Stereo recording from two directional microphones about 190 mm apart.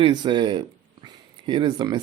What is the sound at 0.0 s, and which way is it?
Speech, 25° right (ahead or behind).